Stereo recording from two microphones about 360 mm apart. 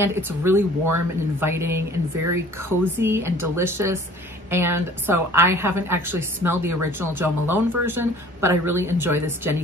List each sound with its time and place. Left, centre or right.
0.0 s a woman's voice: centre